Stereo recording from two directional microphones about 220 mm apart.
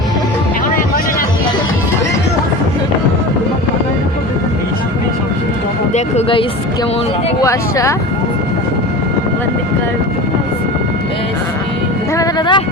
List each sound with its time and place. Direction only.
5.9 s speech: 25° left (ahead or behind)
7.4 s speech: 15° left (ahead or behind)
12.1 s speech: 20° left (ahead or behind)